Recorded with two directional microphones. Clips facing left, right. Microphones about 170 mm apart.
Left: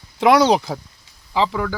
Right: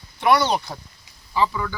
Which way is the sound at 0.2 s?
90° left.